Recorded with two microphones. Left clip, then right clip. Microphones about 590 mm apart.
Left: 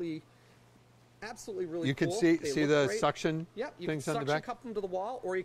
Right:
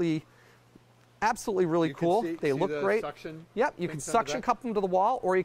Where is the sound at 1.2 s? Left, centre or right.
Right.